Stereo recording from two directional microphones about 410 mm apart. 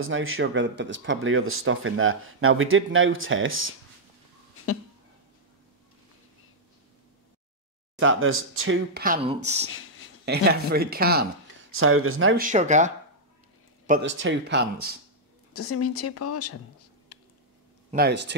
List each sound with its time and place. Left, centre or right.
0.0 s speech: right
8.0 s speech: right
9.7 s a sound: left
10.2 s speech: right
12.4 s speech: centre
15.5 s speech: left
17.9 s speech: right